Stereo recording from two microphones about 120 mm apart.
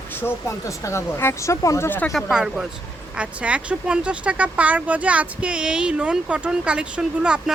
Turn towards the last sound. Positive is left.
turn(degrees=-10)  # may be behind; listen again after turning